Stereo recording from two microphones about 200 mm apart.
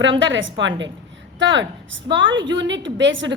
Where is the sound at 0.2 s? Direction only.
70° right (ahead or behind).